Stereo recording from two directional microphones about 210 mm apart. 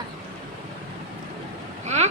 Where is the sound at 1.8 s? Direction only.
35° right (ahead or behind).